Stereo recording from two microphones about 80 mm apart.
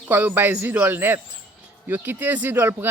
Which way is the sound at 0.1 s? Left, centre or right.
Right.